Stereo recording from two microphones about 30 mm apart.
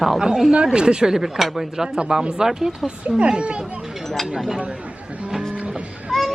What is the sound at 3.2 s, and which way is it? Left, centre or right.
Speech, right.